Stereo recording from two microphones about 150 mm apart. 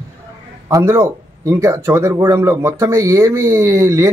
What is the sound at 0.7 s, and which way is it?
Speech, 20° right (ahead or behind).